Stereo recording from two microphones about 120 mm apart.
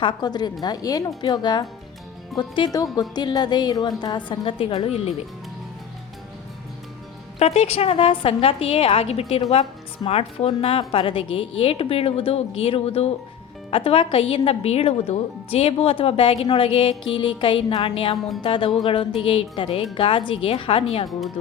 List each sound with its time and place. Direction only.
0.0 s a woman's voice: 40° left (ahead or behind)
7.3 s a woman's voice: 60° left (ahead or behind)